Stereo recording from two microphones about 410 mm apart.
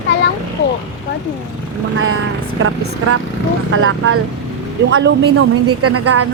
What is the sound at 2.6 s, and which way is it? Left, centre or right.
A woman's voice, right.